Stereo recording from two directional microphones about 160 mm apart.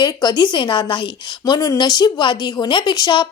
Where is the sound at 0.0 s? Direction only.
25° left (ahead or behind).